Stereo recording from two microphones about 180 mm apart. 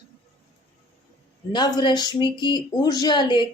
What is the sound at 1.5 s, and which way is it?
Speech, 25° left (ahead or behind).